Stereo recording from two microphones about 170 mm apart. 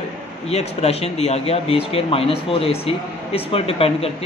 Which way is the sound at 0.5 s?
40° left (ahead or behind).